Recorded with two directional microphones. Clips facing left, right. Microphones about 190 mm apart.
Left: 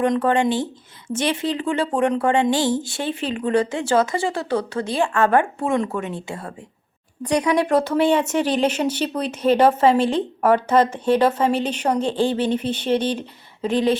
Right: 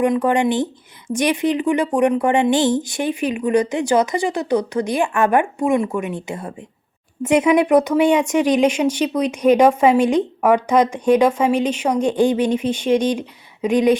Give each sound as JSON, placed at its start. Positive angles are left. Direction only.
{"t": 0.0, "sound": "speech", "side_deg": -15}